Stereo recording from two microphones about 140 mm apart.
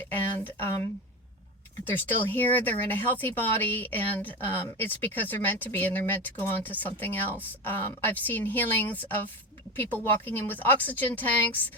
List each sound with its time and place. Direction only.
0.0 s speech: 15° left (ahead or behind)
1.9 s speech: 15° left (ahead or behind)